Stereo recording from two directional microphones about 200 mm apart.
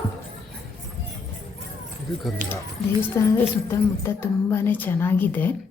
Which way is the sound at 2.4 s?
40° right (ahead or behind).